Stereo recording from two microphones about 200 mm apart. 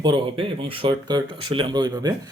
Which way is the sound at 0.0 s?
25° right (ahead or behind).